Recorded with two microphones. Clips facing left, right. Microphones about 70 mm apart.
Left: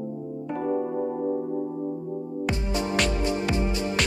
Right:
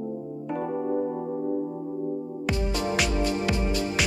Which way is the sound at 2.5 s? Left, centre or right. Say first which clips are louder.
Right 1 dB; left.